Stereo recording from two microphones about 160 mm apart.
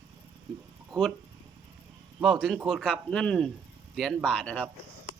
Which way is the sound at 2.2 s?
5° right (ahead or behind).